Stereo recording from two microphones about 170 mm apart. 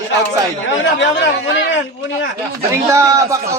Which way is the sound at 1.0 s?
90° left.